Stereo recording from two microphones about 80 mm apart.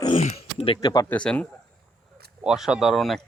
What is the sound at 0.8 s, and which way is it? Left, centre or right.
Speech, left.